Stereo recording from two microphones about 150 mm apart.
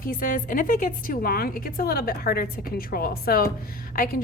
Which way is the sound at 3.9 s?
70° left (ahead or behind).